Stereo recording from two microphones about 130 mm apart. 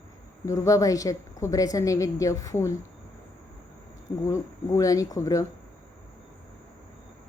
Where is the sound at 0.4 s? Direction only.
25° left (ahead or behind).